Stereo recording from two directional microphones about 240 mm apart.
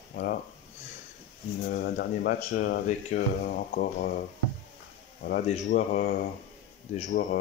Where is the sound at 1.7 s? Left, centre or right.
Left.